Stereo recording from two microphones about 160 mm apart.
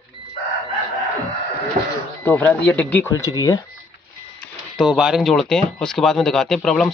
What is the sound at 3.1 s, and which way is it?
Speech, 20° left (ahead or behind).